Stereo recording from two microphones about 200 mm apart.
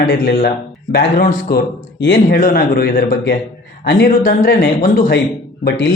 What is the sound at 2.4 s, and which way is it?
Speech, 45° left (ahead or behind).